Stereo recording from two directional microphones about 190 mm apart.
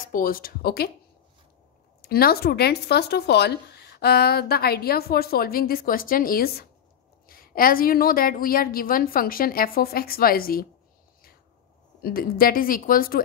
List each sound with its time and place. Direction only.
0.0 s a woman's voice: 45° left (ahead or behind)
2.0 s a woman's voice: 55° left (ahead or behind)
12.0 s a woman's voice: 50° left (ahead or behind)